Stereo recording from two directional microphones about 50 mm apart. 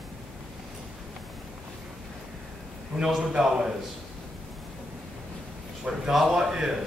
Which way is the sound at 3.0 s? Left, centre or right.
Centre.